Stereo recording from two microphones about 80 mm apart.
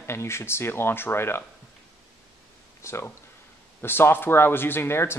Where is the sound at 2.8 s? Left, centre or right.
Left.